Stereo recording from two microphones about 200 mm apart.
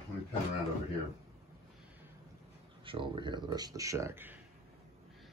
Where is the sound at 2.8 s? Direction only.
25° right (ahead or behind).